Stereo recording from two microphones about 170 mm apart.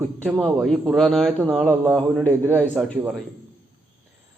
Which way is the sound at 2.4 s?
10° right (ahead or behind).